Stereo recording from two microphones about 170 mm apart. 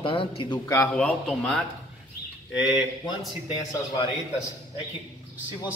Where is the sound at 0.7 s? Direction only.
10° left (ahead or behind).